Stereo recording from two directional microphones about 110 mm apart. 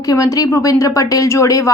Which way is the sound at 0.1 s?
30° left (ahead or behind).